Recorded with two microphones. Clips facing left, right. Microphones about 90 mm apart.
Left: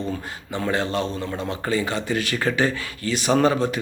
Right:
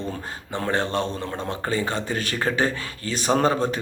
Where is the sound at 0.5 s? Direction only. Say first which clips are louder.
Even; 45° right (ahead or behind).